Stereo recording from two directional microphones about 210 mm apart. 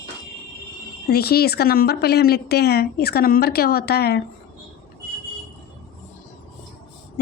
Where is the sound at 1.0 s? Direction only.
45° left (ahead or behind).